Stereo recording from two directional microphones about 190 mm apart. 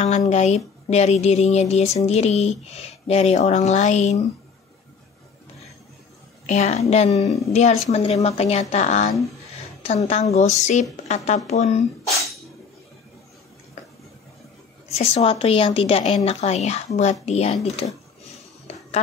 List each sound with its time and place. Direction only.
0.0 s speech: 35° left (ahead or behind)
6.4 s speech: 35° left (ahead or behind)
10.3 s speech: 35° left (ahead or behind)
15.0 s speech: 30° left (ahead or behind)